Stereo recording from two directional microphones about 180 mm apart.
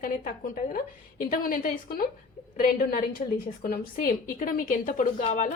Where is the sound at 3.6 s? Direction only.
55° left (ahead or behind).